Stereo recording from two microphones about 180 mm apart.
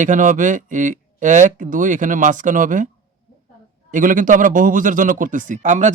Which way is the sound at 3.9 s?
45° right (ahead or behind).